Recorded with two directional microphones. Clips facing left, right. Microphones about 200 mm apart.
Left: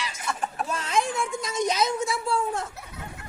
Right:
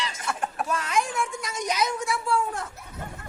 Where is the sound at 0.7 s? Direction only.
25° left (ahead or behind).